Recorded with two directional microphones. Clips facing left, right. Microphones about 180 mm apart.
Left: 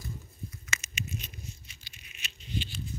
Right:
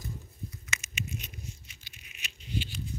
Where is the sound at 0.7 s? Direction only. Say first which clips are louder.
Left 1 dB; 15° right (ahead or behind).